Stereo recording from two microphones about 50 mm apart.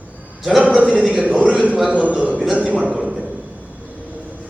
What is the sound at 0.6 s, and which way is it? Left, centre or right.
A man's voice, right.